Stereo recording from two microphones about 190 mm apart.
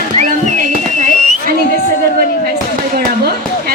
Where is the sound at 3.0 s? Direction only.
55° right (ahead or behind).